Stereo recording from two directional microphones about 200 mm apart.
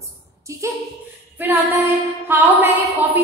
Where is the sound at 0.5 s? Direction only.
15° right (ahead or behind).